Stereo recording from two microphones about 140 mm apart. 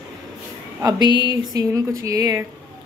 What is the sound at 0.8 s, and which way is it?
Speech, 30° right (ahead or behind).